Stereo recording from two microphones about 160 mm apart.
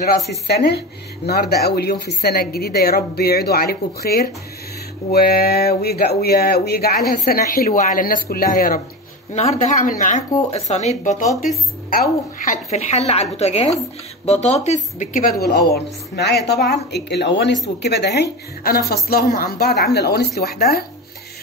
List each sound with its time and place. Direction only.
0.5 s a woman's voice: 90° left; by 8.8 s 60° left (ahead or behind)
9.3 s a woman's voice: 45° left (ahead or behind)
10.5 s a woman's voice: 45° left (ahead or behind)
11.4 s speech: 60° left (ahead or behind)
12.7 s a woman's voice: 40° left (ahead or behind)
15.4 s a woman's voice: 90° left; by 19.8 s 70° left (ahead or behind)
19.9 s speech: 90° left; by 20.8 s 75° left (ahead or behind)